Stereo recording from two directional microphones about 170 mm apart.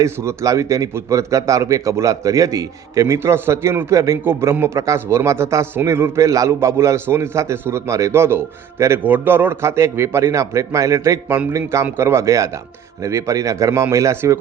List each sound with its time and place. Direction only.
0.0 s a man's voice: 15° right (ahead or behind)